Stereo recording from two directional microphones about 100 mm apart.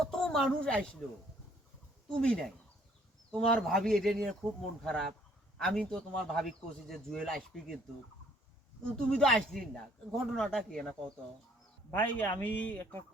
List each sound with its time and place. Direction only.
0.0 s speech: 5° left (ahead or behind)
2.2 s a man's voice: 10° left (ahead or behind)
9.0 s a man's voice: 10° left (ahead or behind)
11.9 s a man's voice: 15° left (ahead or behind)